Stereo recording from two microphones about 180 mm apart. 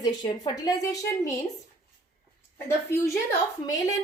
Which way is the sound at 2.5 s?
15° left (ahead or behind).